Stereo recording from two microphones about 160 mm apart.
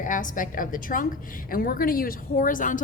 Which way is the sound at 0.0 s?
55° left (ahead or behind).